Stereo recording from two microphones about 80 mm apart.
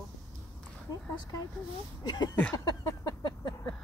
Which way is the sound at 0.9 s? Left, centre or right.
Left.